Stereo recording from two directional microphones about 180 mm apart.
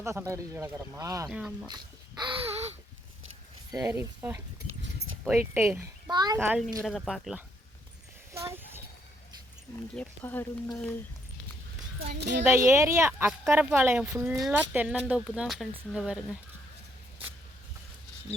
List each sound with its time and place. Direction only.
0.0 s speech: 15° right (ahead or behind)
1.3 s speech: 5° right (ahead or behind)
1.6 s speech: 25° right (ahead or behind)
3.7 s a child's voice: 20° right (ahead or behind)
6.4 s speech: 5° right (ahead or behind)
8.3 s a sound: 15° right (ahead or behind)
9.9 s speech: 10° left (ahead or behind)
12.0 s speech: 70° right (ahead or behind)
12.5 s speech: 15° right (ahead or behind)